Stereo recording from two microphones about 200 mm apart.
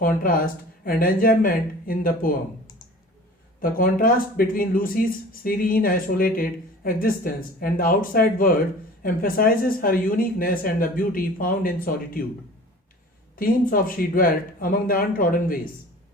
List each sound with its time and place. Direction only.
0.0 s speech: 45° left (ahead or behind)
3.6 s speech: 45° left (ahead or behind)
13.3 s speech: 45° left (ahead or behind)